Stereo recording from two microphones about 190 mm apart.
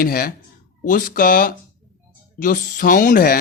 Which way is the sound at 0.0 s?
50° left (ahead or behind).